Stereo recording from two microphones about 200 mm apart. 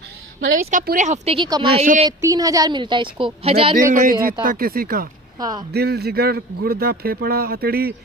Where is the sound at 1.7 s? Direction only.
35° right (ahead or behind).